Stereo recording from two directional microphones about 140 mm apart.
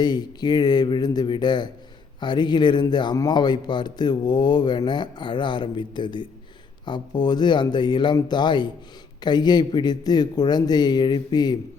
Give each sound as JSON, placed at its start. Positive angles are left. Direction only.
{"t": 0.0, "sound": "a man's voice", "side_deg": 30}